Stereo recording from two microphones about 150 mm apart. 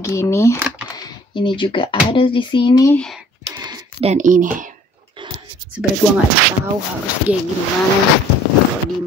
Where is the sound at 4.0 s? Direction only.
50° right (ahead or behind).